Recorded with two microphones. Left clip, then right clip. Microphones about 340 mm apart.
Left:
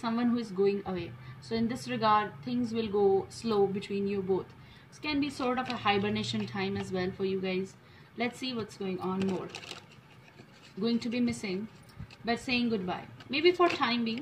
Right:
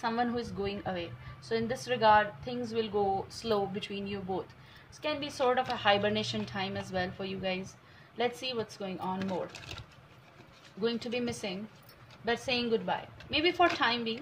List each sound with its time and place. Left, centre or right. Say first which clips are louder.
0.0 s a woman's voice: right 1 dB; centre
10.8 s a woman's voice: left 1 dB; centre